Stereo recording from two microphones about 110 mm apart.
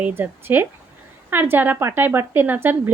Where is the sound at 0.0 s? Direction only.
20° right (ahead or behind).